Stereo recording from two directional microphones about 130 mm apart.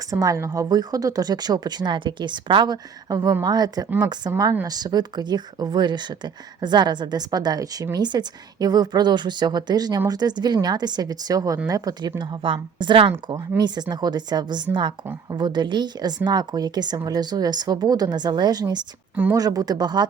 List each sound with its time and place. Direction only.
0.1 s a woman's voice: 25° right (ahead or behind)
12.4 s a woman's voice: 40° right (ahead or behind)
19.1 s speech: 15° right (ahead or behind)
19.4 s a woman's voice: 30° right (ahead or behind)